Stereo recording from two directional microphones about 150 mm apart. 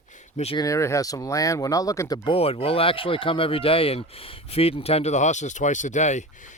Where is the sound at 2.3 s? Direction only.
40° left (ahead or behind).